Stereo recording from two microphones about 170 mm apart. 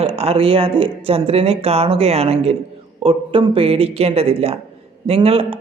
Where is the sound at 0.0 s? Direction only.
35° right (ahead or behind).